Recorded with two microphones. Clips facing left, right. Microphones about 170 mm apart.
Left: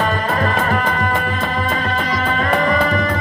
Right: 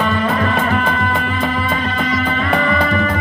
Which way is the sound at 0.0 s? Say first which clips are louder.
Right 2 dB; 40° left (ahead or behind).